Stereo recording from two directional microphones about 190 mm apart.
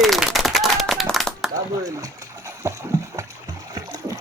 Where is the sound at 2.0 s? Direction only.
15° right (ahead or behind).